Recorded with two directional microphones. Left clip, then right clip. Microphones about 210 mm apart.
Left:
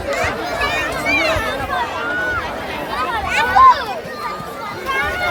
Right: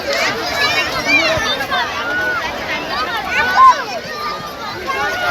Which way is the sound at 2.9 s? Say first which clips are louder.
Left 1 dB; 40° left (ahead or behind).